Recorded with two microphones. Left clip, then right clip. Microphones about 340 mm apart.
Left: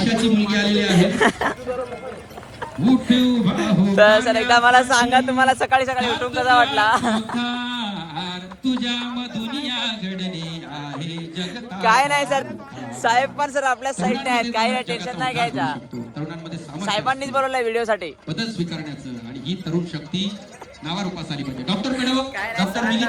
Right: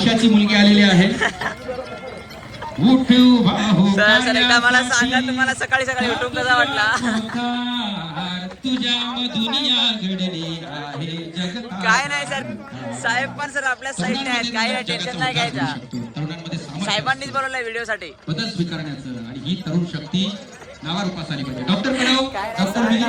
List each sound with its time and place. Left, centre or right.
0.0 s a man's voice: centre
1.1 s a man's voice: centre
2.8 s a man's voice: centre
3.9 s a man's voice: centre
7.3 s speech: left
11.8 s a man's voice: centre
16.8 s a man's voice: centre; by 22.8 s left